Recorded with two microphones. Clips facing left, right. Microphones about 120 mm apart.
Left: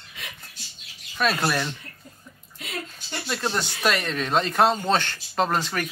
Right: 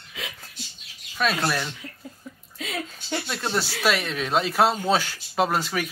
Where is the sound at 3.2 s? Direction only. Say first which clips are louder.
Left 3 dB; centre (ahead or behind).